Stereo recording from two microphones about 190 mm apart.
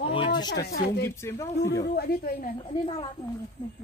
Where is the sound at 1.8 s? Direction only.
50° left (ahead or behind).